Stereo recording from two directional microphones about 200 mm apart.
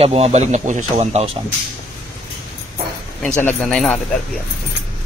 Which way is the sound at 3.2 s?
5° left (ahead or behind).